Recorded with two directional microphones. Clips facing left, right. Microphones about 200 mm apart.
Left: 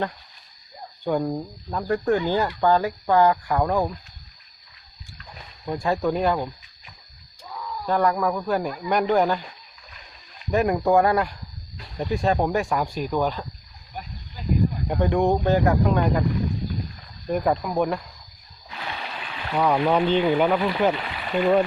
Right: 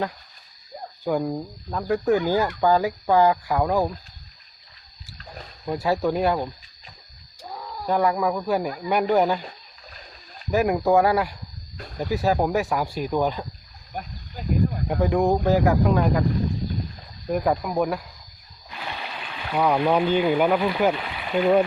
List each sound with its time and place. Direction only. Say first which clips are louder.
1.0 s speech: even; 5° right (ahead or behind)
5.1 s rowboat: right 4 dB; 45° right (ahead or behind)
5.7 s speech: right 1 dB; 5° right (ahead or behind)
7.4 s wild animals: left 1 dB; 40° right (ahead or behind)
7.9 s speech: even; 10° right (ahead or behind)
9.5 s splash: right 3 dB; 35° right (ahead or behind)
10.5 s speech: even; 5° right (ahead or behind)
13.9 s speech: right 3 dB; 45° right (ahead or behind)
14.8 s speech: even; centre (ahead or behind)
17.2 s speech: even; centre (ahead or behind)